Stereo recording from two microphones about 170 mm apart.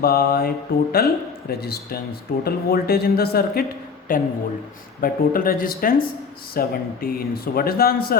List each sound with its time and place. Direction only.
0.0 s a man's voice: 60° left (ahead or behind)